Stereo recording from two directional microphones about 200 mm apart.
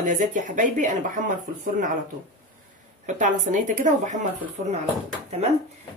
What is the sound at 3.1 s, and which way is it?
Speech, 40° right (ahead or behind).